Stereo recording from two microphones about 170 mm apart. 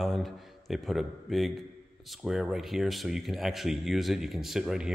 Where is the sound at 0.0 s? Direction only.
Centre (ahead or behind).